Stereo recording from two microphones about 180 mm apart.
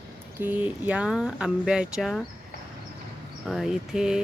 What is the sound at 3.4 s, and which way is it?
Speech, centre (ahead or behind).